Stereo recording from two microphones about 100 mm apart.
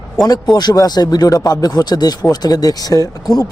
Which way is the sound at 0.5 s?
40° left (ahead or behind).